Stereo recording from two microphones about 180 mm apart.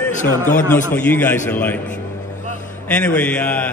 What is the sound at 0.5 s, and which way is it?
A man's voice, 10° left (ahead or behind).